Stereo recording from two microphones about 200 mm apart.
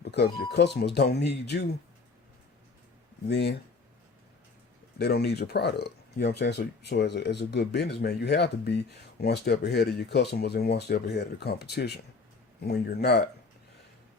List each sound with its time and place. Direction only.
0.0 s speech: 55° left (ahead or behind)
3.2 s speech: 60° left (ahead or behind)
4.9 s speech: 55° left (ahead or behind)